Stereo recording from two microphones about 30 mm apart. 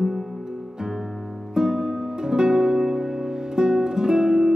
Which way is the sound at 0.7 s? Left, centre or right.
Centre.